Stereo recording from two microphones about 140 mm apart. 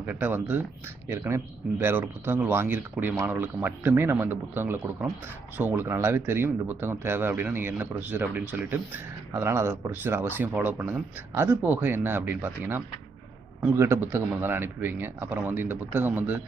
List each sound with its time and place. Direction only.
0.0 s speech: 15° right (ahead or behind)